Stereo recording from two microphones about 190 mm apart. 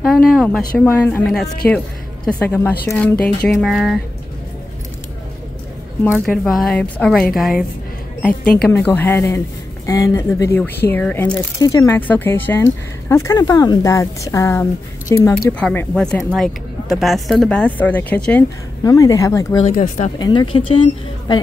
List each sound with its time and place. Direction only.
0.3 s speech: centre (ahead or behind)
6.0 s speech: centre (ahead or behind); by 19.6 s 15° left (ahead or behind)
19.6 s speech: 40° left (ahead or behind)
20.2 s speech: 25° left (ahead or behind)